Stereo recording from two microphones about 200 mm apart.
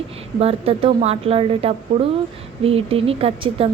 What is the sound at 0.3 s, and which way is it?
A woman's voice, 30° right (ahead or behind).